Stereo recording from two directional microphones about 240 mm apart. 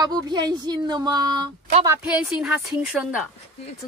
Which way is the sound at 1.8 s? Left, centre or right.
Centre.